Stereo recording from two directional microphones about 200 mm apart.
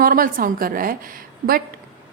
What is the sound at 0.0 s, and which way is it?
A woman's voice, 45° right (ahead or behind).